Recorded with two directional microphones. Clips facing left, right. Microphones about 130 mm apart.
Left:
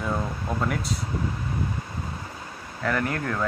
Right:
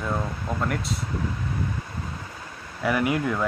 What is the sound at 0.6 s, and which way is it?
Speech, centre (ahead or behind).